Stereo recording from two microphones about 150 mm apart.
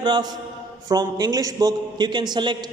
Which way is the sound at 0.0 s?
30° right (ahead or behind).